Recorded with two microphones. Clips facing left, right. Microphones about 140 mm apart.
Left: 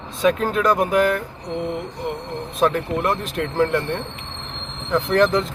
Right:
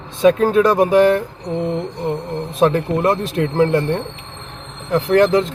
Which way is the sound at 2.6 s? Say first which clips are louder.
Right 4 dB; 30° right (ahead or behind).